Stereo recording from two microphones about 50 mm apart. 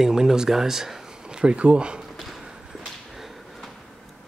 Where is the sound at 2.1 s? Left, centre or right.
Centre.